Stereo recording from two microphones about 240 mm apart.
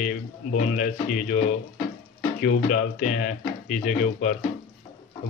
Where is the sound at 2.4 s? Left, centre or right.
Left.